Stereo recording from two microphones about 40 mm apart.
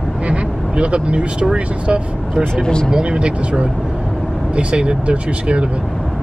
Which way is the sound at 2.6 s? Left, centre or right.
Centre.